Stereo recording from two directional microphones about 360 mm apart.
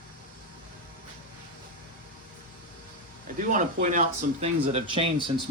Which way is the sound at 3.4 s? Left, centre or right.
Right.